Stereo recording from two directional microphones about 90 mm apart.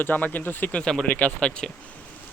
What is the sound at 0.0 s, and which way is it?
Speech, 20° left (ahead or behind).